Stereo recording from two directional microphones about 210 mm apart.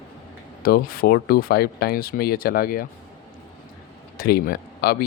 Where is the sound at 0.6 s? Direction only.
45° left (ahead or behind).